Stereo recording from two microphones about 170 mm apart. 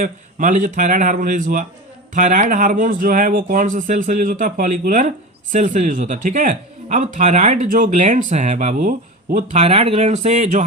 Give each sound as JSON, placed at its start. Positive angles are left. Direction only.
{"t": 0.0, "sound": "speech", "side_deg": -50}